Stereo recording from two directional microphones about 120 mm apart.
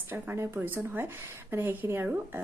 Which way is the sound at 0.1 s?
15° right (ahead or behind).